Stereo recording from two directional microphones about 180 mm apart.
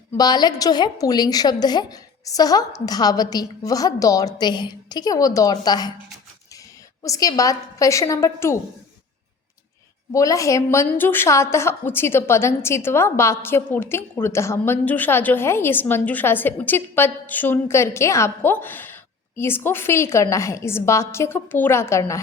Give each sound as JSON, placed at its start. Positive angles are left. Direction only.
{"t": 0.2, "sound": "a woman's voice", "side_deg": 20}
{"t": 7.0, "sound": "a woman's voice", "side_deg": 20}
{"t": 10.1, "sound": "a woman's voice", "side_deg": 20}